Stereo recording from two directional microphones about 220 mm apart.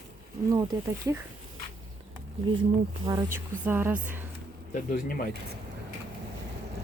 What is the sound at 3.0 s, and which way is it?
Speech, 15° right (ahead or behind).